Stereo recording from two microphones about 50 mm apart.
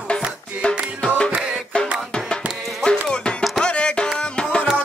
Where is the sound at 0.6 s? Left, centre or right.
Centre.